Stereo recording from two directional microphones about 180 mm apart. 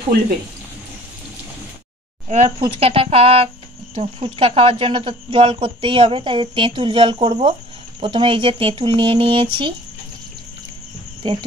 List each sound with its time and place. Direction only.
2.2 s speech: 35° right (ahead or behind)